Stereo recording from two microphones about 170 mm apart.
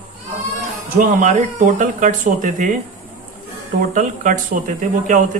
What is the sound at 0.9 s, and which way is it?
Speech, 45° right (ahead or behind).